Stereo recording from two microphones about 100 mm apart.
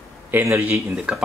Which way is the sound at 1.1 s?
10° right (ahead or behind).